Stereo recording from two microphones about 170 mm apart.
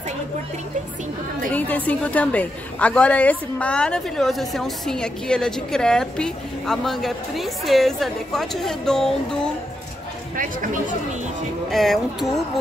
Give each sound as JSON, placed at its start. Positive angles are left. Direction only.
{"t": 1.5, "sound": "a woman's voice", "side_deg": 10}
{"t": 10.3, "sound": "speech", "side_deg": -50}
{"t": 11.7, "sound": "a woman's voice", "side_deg": 0}